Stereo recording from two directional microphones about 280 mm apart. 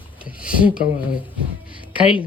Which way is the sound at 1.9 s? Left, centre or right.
Centre.